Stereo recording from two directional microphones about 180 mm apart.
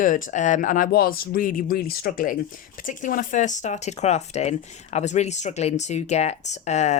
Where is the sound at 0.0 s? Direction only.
45° left (ahead or behind).